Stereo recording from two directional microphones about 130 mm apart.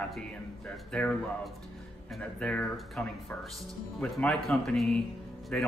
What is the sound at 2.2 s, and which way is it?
Speech, 10° left (ahead or behind).